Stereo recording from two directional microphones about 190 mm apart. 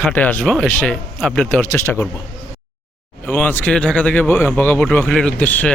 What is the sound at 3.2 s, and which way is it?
Speech, 10° left (ahead or behind).